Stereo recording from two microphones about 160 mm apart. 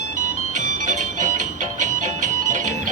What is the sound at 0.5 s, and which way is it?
Music, 50° right (ahead or behind).